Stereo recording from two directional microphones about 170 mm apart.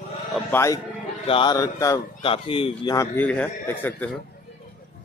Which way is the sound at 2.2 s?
30° left (ahead or behind).